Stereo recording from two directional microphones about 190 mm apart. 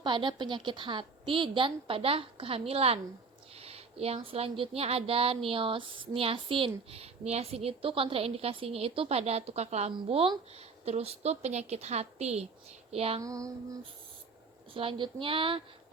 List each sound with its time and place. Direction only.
0.0 s a woman's voice: 25° right (ahead or behind)
13.2 s female singing: 15° right (ahead or behind)
14.7 s a woman's voice: 30° right (ahead or behind)